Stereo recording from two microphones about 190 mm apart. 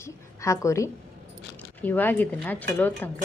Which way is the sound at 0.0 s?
15° left (ahead or behind).